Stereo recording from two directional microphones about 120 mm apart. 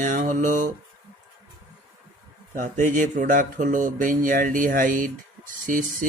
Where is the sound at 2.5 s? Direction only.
90° right.